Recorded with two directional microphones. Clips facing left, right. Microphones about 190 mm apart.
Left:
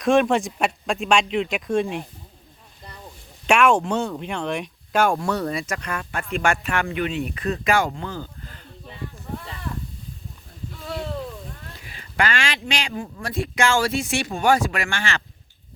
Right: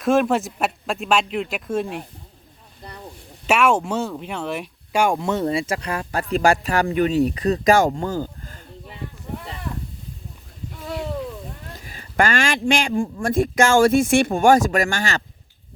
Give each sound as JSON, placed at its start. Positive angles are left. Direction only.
{"t": 0.0, "sound": "speech", "side_deg": -5}
{"t": 3.4, "sound": "speech", "side_deg": -5}
{"t": 11.9, "sound": "speech", "side_deg": -45}